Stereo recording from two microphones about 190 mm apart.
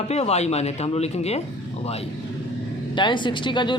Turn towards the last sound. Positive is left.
turn(degrees=25)  # may be behind; listen again after turning